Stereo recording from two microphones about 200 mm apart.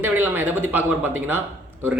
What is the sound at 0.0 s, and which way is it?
Speech, 10° right (ahead or behind).